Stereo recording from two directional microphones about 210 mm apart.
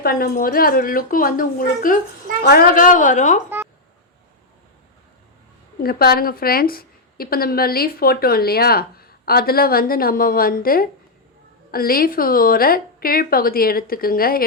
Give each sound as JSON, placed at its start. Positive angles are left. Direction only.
{"t": 0.0, "sound": "a woman's voice", "side_deg": 45}
{"t": 5.8, "sound": "a woman's voice", "side_deg": 50}